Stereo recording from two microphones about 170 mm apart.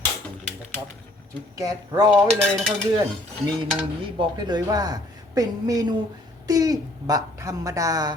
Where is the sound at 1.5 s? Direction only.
20° right (ahead or behind).